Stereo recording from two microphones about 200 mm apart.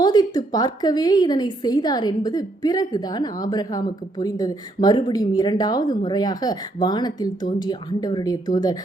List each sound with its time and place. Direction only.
0.0 s a woman's voice: 20° left (ahead or behind)